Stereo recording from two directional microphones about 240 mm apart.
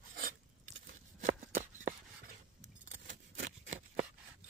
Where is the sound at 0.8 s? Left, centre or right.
Right.